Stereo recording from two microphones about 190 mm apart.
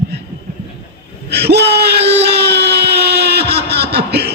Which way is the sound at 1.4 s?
60° right (ahead or behind).